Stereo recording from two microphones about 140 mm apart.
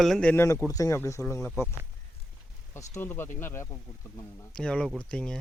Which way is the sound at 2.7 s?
20° left (ahead or behind).